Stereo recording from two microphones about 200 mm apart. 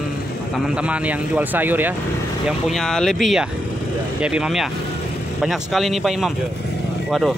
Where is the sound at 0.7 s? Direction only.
5° right (ahead or behind).